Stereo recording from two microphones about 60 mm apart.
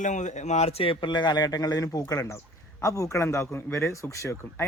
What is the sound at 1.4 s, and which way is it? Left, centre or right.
Speech, left.